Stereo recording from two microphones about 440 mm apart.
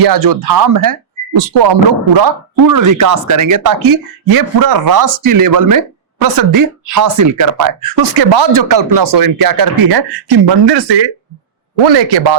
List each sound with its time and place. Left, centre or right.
0.0 s speech: right
1.5 s speech: right
2.2 s speech: right
8.5 s speech: right
10.2 s speech: right